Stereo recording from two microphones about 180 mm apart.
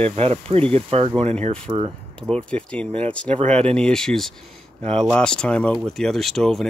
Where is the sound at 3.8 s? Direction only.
5° left (ahead or behind).